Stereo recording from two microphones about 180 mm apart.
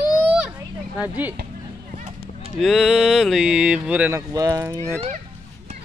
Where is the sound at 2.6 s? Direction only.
Centre (ahead or behind).